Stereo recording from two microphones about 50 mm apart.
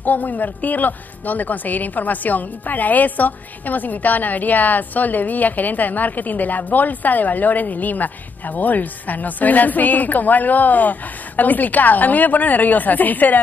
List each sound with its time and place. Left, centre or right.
0.0 s a woman's voice: left